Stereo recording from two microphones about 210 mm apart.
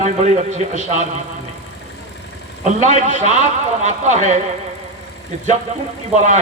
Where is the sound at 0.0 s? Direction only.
35° right (ahead or behind).